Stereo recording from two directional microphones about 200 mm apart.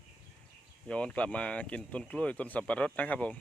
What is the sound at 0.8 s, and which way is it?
Speech, 5° left (ahead or behind).